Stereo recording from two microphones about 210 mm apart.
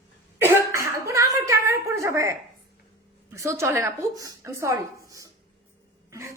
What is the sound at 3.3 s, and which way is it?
A woman's voice, 15° right (ahead or behind).